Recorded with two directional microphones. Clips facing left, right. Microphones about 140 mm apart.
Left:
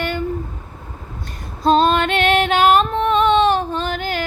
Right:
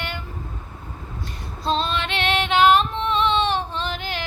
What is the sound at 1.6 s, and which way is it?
Female singing, 50° left (ahead or behind).